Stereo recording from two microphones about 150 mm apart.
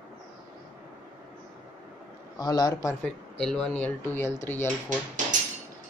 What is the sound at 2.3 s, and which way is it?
Speech, 25° left (ahead or behind).